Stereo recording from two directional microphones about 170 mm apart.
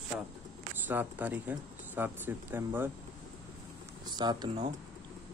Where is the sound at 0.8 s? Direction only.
10° right (ahead or behind).